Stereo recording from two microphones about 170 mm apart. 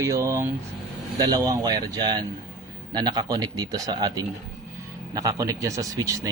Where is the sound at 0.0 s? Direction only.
20° right (ahead or behind).